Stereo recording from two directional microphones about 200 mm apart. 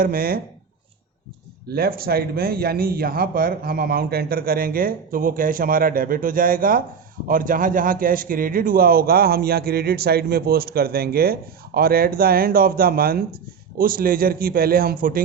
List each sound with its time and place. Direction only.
0.0 s a man's voice: 45° right (ahead or behind)
1.6 s a man's voice: 50° right (ahead or behind)